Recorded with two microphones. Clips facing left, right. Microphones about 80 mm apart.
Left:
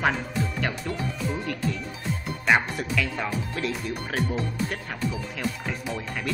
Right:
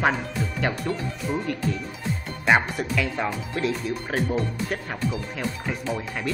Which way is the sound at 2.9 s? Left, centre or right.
Centre.